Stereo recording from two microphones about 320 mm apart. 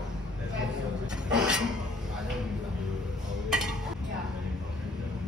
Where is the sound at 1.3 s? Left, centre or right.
Centre.